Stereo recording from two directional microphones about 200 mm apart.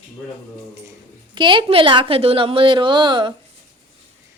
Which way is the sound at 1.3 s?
25° right (ahead or behind).